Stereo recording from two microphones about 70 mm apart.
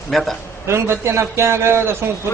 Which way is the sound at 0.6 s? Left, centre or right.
Right.